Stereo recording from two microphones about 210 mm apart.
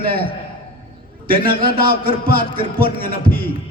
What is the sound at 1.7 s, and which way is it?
Music, 45° right (ahead or behind).